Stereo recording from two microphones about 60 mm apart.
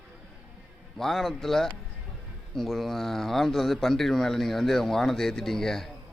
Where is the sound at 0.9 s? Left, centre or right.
Centre.